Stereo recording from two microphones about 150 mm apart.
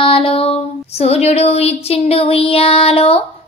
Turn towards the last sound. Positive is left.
turn(degrees=40)  # may be behind; listen again after turning